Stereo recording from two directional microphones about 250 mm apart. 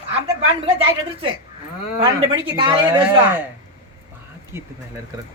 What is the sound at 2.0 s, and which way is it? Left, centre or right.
Speech, centre.